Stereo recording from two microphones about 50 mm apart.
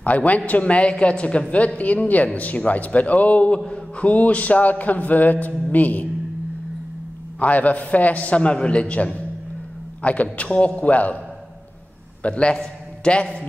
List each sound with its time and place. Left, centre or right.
0.0 s a woman's voice: left
7.3 s a woman's voice: left
12.2 s a man's voice: left